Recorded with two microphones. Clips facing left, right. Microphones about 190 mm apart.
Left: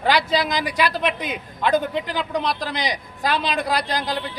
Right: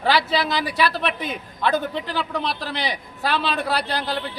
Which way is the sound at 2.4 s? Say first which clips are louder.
Left 3 dB; 40° left (ahead or behind).